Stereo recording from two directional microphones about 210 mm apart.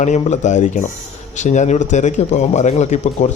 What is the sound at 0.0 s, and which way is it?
Speech, 35° left (ahead or behind).